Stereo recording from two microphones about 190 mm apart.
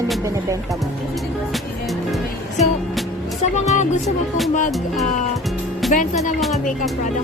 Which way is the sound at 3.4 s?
40° left (ahead or behind).